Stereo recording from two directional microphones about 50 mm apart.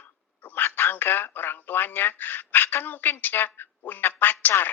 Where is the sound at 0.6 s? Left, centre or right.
Left.